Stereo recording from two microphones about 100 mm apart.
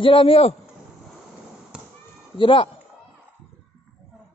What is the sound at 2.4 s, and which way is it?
Speech, 55° left (ahead or behind).